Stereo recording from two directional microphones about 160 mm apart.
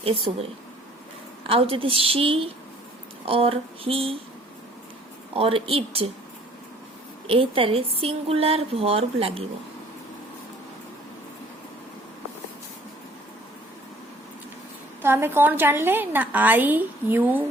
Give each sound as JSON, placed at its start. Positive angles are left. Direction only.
{"t": 0.3, "sound": "a woman's voice", "side_deg": -40}
{"t": 1.5, "sound": "a woman's voice", "side_deg": -35}
{"t": 5.3, "sound": "a woman's voice", "side_deg": -35}
{"t": 7.3, "sound": "a woman's voice", "side_deg": -35}
{"t": 15.0, "sound": "a woman's voice", "side_deg": -15}